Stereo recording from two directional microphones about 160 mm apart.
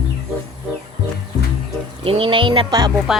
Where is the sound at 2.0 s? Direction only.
35° right (ahead or behind).